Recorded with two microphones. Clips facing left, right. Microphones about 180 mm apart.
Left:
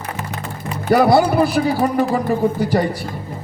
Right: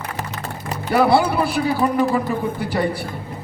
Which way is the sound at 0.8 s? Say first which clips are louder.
Left 3 dB; 45° left (ahead or behind).